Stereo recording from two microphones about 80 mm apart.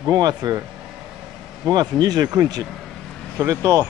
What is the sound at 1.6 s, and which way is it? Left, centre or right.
Speech, right.